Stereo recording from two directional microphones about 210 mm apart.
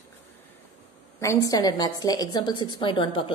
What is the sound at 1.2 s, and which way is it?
A woman's voice, 15° left (ahead or behind).